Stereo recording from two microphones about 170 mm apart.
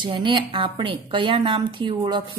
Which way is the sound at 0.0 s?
30° right (ahead or behind).